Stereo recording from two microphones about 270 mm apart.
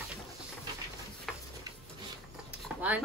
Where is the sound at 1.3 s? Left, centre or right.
Centre.